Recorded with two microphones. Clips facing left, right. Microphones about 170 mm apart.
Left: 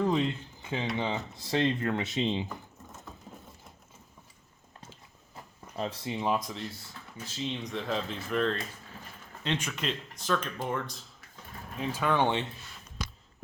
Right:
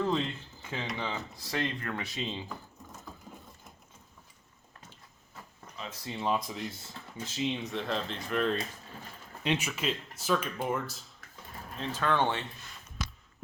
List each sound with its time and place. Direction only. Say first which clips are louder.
0.0 s a sound: left 3 dB; 15° left (ahead or behind)
0.9 s speech: left 4 dB; 20° left (ahead or behind)
5.9 s speech: left 5 dB; 25° left (ahead or behind)
6.1 s speech: left 1 dB; 10° left (ahead or behind)
7.2 s speech: right 3 dB; 15° right (ahead or behind)
7.6 s speech: left 1 dB; centre (ahead or behind)
11.8 s speech: left 2 dB; 10° left (ahead or behind)